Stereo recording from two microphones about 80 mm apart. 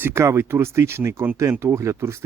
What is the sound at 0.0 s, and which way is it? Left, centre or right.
Speech, right.